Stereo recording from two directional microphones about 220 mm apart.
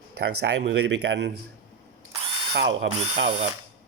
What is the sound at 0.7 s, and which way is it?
Speech, 50° right (ahead or behind).